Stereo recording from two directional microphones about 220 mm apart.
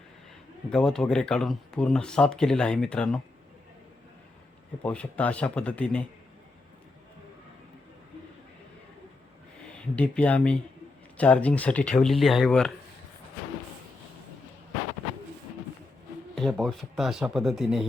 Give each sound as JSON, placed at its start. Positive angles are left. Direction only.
{"t": 0.7, "sound": "speech", "side_deg": 5}
{"t": 4.8, "sound": "speech", "side_deg": 5}
{"t": 9.7, "sound": "speech", "side_deg": 5}
{"t": 16.3, "sound": "speech", "side_deg": 0}